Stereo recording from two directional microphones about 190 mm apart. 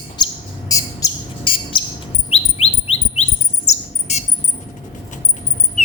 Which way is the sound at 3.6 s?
35° left (ahead or behind).